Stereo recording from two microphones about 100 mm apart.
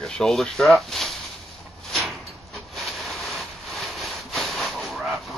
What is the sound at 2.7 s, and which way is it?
Sawing, centre (ahead or behind).